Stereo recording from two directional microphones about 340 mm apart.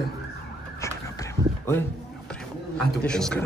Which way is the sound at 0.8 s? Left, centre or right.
Centre.